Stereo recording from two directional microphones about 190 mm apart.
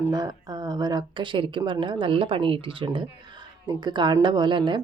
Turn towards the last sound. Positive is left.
turn(degrees=-25)  # may be behind; listen again after turning